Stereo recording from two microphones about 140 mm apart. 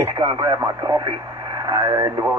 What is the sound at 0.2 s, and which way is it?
Speech, 30° right (ahead or behind).